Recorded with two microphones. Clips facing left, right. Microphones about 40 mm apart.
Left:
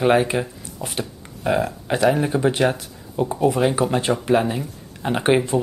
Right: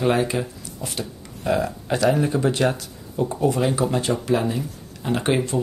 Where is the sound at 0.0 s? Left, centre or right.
Left.